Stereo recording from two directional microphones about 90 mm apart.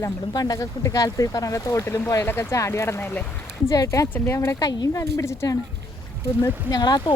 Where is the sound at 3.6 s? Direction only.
35° left (ahead or behind).